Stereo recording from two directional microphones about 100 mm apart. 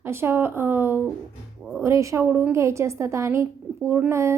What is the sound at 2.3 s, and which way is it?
Speech, 15° right (ahead or behind).